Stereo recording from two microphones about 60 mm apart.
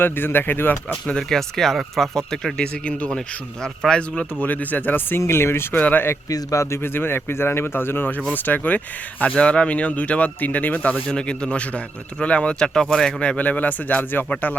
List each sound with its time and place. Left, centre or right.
0.0 s speech: left
1.0 s speech: centre
4.4 s speech: left
5.2 s speech: left
5.7 s speech: left
6.3 s a man's voice: left
6.8 s speech: left
10.9 s speech: centre